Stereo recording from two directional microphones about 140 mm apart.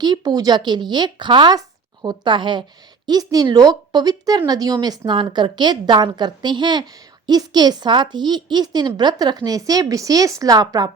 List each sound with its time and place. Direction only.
0.0 s a woman's voice: 30° right (ahead or behind)